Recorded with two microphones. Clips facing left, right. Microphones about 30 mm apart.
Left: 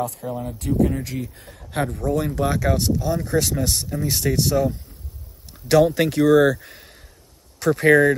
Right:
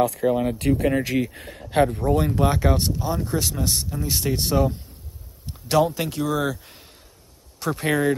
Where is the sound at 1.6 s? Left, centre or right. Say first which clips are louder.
Right 5 dB; right.